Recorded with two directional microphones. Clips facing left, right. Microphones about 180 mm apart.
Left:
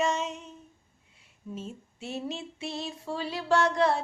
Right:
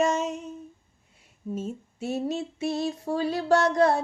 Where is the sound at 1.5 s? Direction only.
45° right (ahead or behind).